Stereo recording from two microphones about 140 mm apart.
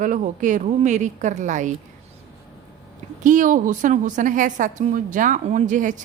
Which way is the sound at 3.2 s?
65° right (ahead or behind).